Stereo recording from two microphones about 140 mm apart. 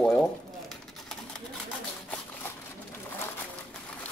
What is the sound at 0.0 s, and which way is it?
Boiling, 5° left (ahead or behind).